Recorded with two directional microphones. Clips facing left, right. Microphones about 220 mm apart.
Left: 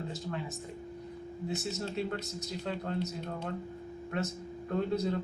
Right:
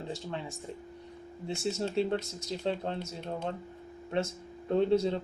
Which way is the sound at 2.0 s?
30° right (ahead or behind).